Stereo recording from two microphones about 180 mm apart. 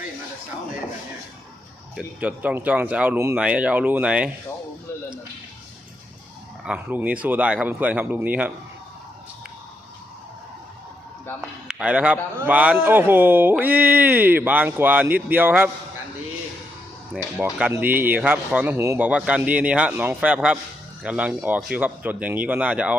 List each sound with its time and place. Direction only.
2.0 s a man's voice: 5° right (ahead or behind)
6.7 s a man's voice: 10° right (ahead or behind)
11.3 s a man's voice: 5° right (ahead or behind)
17.3 s a man's voice: 5° right (ahead or behind)